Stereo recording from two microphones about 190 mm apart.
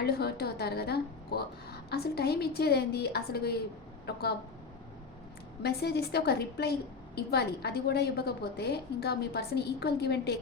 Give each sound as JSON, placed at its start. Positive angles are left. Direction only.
{"t": 0.0, "sound": "a woman's voice", "side_deg": 55}
{"t": 5.6, "sound": "a woman's voice", "side_deg": 60}